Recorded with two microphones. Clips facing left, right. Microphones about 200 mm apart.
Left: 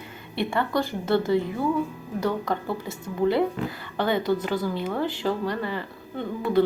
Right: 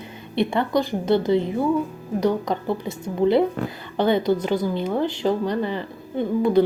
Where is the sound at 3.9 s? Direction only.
20° right (ahead or behind).